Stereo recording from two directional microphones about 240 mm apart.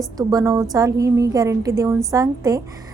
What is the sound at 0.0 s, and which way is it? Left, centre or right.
A woman's voice, centre.